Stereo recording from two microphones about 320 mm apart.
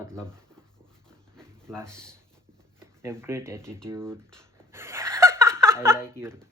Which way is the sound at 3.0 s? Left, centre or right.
Centre.